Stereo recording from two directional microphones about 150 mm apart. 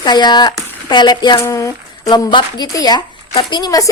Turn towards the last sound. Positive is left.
turn(degrees=25)  # may be behind; listen again after turning